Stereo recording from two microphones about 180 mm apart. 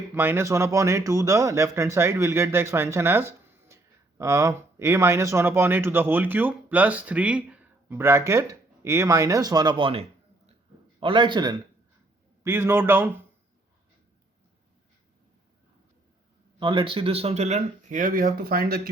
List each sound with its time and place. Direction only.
0.1 s a man's voice: 15° right (ahead or behind)
16.6 s speech: 30° right (ahead or behind); by 18.8 s 55° right (ahead or behind)